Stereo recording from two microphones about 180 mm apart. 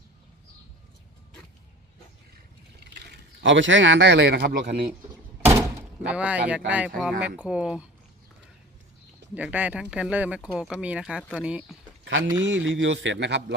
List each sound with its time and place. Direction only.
3.4 s speech: 90° right; by 4.7 s 65° right (ahead or behind)
5.5 s door: 10° right (ahead or behind)
6.7 s speech: 5° right (ahead or behind)
9.3 s speech: 10° right (ahead or behind)
12.0 s a man's voice: 90° right